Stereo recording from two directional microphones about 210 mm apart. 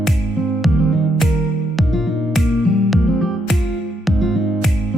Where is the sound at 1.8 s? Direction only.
Centre (ahead or behind).